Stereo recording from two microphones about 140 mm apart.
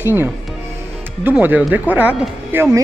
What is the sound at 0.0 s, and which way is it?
A woman's voice, 15° right (ahead or behind).